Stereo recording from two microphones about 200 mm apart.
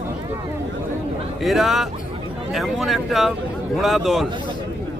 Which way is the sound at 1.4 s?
Centre (ahead or behind).